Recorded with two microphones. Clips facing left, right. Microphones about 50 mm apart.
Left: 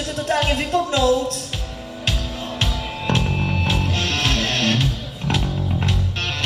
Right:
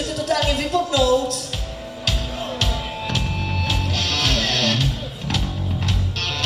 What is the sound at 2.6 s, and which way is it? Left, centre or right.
Music, left.